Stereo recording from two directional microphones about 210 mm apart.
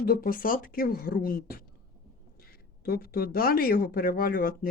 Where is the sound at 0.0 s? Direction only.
45° left (ahead or behind).